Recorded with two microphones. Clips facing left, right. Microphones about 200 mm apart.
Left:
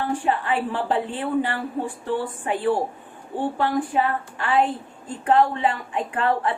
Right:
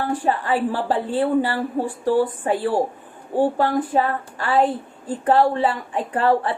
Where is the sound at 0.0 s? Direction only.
40° right (ahead or behind).